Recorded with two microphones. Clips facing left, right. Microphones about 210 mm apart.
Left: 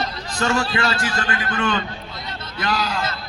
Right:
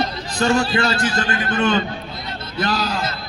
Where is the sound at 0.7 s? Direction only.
35° right (ahead or behind).